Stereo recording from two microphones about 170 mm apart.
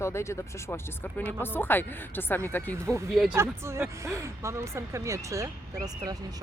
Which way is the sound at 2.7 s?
15° right (ahead or behind).